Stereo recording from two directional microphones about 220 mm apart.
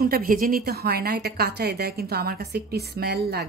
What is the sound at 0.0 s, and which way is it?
A woman's voice, 40° right (ahead or behind).